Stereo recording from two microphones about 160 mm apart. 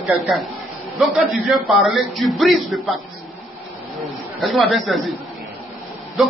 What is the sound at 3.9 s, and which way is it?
A man's voice, centre (ahead or behind).